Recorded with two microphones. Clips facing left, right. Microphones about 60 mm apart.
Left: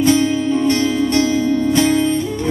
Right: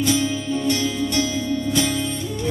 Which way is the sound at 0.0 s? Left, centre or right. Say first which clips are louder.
Left 7 dB; left.